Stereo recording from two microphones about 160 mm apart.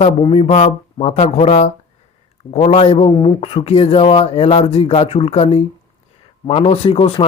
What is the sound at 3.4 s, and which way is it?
Speech, 40° left (ahead or behind).